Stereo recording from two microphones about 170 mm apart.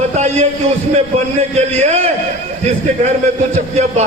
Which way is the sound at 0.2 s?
40° right (ahead or behind).